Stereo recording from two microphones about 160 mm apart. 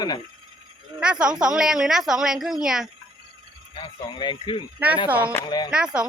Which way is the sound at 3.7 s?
30° left (ahead or behind).